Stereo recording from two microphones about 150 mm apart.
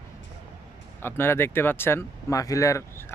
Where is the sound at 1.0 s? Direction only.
15° left (ahead or behind).